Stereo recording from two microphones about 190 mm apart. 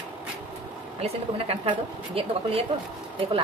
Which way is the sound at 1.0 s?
30° right (ahead or behind).